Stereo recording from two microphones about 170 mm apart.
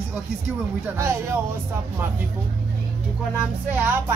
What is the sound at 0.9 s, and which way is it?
Speech, 15° right (ahead or behind).